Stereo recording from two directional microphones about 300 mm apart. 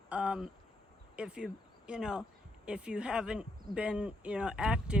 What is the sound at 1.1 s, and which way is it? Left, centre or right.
Speech, centre.